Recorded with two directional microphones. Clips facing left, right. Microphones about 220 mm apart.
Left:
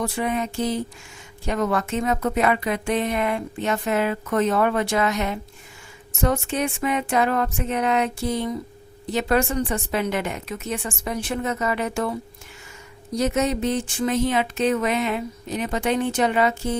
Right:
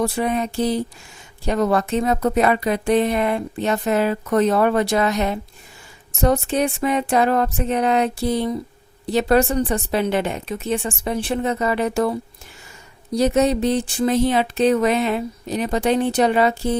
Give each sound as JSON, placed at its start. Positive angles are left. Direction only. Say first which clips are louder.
{"t": 0.0, "sound": "speech", "louder": "right 4 dB", "side_deg": -35}
{"t": 13.1, "sound": "speech", "louder": "right 5 dB", "side_deg": -35}